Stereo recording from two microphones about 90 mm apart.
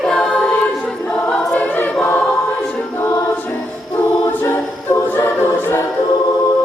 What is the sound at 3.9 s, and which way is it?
A capella, 25° left (ahead or behind).